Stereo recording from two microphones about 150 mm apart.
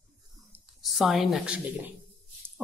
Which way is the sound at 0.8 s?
Centre (ahead or behind).